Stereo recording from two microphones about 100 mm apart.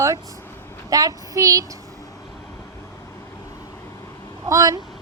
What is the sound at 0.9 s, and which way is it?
Speech, 40° right (ahead or behind).